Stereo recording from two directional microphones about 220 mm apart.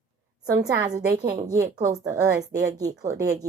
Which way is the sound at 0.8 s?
15° right (ahead or behind).